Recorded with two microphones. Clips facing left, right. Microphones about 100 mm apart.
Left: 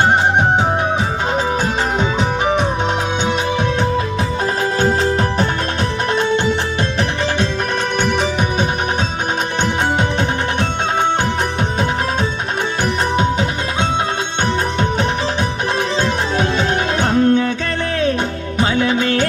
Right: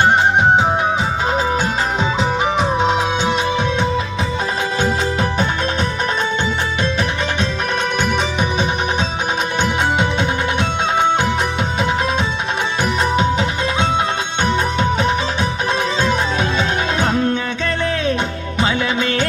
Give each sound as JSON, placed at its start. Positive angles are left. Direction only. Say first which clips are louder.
{"t": 10.0, "sound": "music", "louder": "even", "side_deg": 50}
{"t": 13.1, "sound": "music", "louder": "even", "side_deg": 40}
{"t": 16.0, "sound": "music", "louder": "even", "side_deg": 55}
{"t": 18.6, "sound": "music", "louder": "left 2 dB", "side_deg": 40}